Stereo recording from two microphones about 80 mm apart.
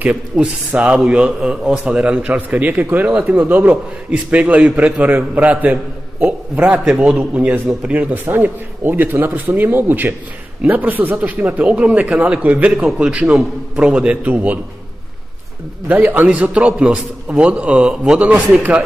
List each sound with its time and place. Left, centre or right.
0.0 s speech: centre
15.9 s speech: right